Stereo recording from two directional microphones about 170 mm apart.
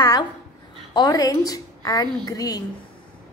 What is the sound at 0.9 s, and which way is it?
A woman's voice, 25° left (ahead or behind).